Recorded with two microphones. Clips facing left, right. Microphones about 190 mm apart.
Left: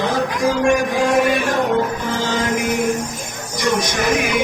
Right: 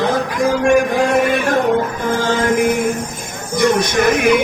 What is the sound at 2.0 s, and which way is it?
Music, 55° right (ahead or behind).